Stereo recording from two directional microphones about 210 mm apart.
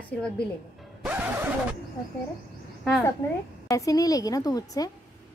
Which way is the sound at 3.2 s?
15° left (ahead or behind).